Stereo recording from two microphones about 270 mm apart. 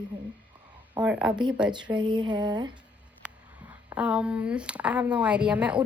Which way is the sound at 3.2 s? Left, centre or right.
Centre.